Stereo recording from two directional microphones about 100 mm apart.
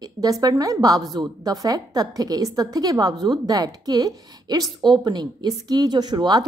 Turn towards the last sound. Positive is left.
turn(degrees=-45)  # may be behind; listen again after turning